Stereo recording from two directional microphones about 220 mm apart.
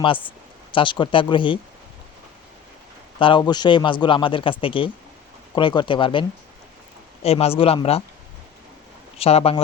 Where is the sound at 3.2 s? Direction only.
20° left (ahead or behind).